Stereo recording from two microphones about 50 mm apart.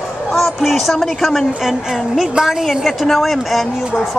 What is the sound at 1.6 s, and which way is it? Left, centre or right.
A woman's voice, centre.